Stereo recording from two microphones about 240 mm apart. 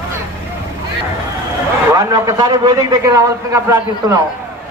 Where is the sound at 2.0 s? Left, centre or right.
Centre.